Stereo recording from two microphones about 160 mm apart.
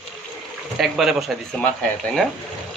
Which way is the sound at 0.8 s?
Centre (ahead or behind).